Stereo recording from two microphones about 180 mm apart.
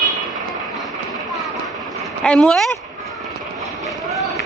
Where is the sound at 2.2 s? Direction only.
5° left (ahead or behind).